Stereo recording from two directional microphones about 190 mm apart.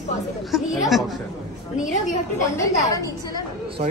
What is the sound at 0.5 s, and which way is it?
Chatter, centre (ahead or behind).